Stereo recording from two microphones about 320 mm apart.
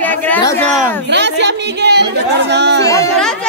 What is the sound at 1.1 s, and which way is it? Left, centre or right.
Speech, right.